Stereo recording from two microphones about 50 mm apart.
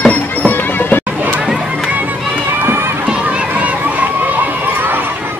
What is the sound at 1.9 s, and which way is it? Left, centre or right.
Run, right.